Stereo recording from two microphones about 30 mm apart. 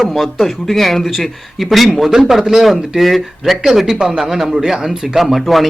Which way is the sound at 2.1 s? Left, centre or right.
Centre.